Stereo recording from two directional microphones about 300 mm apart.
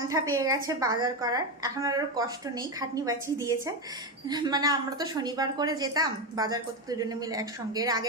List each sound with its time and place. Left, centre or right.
0.1 s a woman's voice: centre